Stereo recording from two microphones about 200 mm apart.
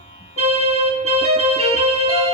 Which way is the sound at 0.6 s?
30° right (ahead or behind).